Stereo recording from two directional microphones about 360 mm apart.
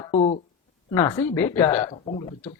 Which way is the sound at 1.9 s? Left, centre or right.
Centre.